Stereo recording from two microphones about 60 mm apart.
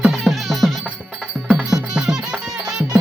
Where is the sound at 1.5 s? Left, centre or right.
Centre.